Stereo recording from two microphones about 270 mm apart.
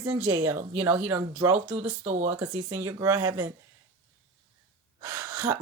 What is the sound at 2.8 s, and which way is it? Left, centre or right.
Speech, centre.